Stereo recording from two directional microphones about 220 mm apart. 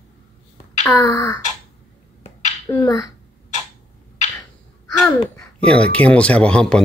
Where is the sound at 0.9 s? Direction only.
15° left (ahead or behind).